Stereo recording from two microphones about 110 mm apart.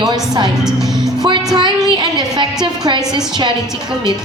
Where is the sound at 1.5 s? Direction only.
45° right (ahead or behind).